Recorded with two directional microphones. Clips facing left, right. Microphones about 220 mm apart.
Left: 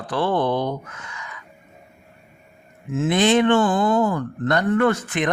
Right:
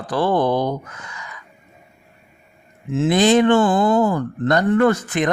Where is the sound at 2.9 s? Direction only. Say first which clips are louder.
Right 3 dB; 35° right (ahead or behind).